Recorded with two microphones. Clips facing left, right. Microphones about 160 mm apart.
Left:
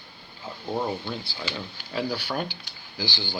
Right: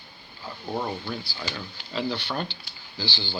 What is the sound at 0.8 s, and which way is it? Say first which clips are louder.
Speech: left 2 dB; 20° left (ahead or behind).